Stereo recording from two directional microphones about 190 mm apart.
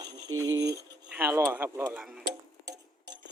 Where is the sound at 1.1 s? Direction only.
10° right (ahead or behind).